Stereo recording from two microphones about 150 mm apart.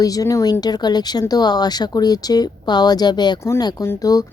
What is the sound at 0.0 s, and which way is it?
Speech, 25° left (ahead or behind).